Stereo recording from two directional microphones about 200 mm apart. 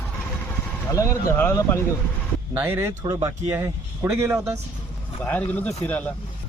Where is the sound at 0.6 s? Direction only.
10° left (ahead or behind).